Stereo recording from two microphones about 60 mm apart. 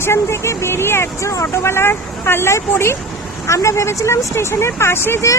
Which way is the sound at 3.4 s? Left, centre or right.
Left.